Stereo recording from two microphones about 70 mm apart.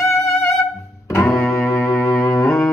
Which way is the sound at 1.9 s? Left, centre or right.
Left.